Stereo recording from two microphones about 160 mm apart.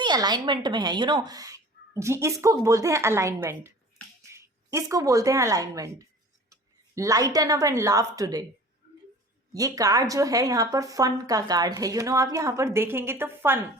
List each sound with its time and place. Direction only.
0.0 s a woman's voice: 25° right (ahead or behind)
9.5 s a woman's voice: 20° right (ahead or behind)